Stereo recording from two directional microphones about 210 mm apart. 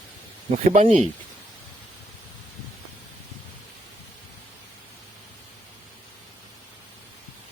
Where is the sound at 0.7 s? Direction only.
35° right (ahead or behind).